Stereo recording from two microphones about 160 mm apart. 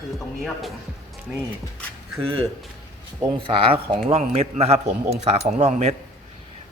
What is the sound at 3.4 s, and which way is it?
A man's voice, 35° right (ahead or behind).